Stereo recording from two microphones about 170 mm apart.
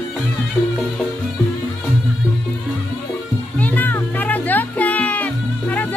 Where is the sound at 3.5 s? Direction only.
10° left (ahead or behind).